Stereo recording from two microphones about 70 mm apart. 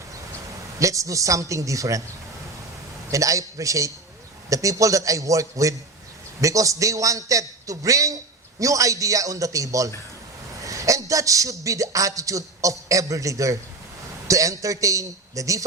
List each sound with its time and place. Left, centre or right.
0.8 s a man's voice: right
3.1 s a man's voice: right